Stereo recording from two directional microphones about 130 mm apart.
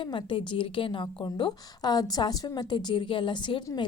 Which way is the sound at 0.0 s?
40° left (ahead or behind).